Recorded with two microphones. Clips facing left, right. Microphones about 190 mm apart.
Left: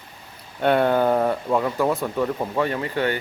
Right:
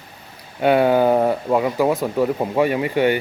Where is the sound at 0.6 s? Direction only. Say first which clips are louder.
Right 3 dB; 5° right (ahead or behind).